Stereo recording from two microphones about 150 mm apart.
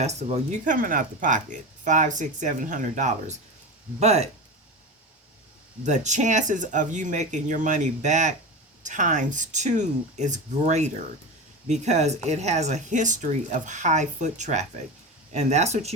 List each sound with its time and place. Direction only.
0.0 s speech: 50° right (ahead or behind)
5.8 s speech: 55° right (ahead or behind)